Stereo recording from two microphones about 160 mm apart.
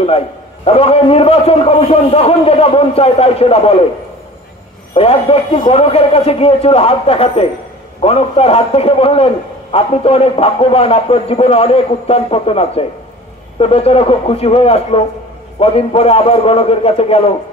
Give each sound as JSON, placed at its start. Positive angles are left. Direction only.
{"t": 0.7, "sound": "a man's voice", "side_deg": 40}
{"t": 4.9, "sound": "a man's voice", "side_deg": 35}